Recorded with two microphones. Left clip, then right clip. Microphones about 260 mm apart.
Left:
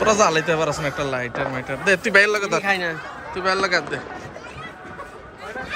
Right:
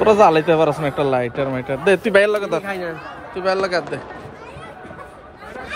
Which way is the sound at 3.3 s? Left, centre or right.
Centre.